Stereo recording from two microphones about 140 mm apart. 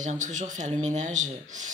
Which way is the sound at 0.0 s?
60° right (ahead or behind).